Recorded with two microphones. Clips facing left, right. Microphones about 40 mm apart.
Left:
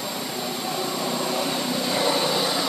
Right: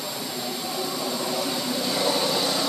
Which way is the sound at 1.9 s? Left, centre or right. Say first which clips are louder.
Left 1 dB; left.